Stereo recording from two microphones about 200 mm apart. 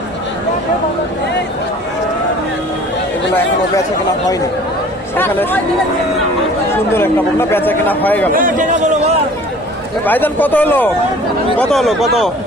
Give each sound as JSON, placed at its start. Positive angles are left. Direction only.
{"t": 5.1, "sound": "speech", "side_deg": 10}
{"t": 6.9, "sound": "speech", "side_deg": 10}
{"t": 8.3, "sound": "a man's voice", "side_deg": -45}
{"t": 10.0, "sound": "a man's voice", "side_deg": 10}